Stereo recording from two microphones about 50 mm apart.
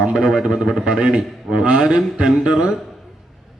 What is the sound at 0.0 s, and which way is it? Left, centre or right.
A man's voice, centre.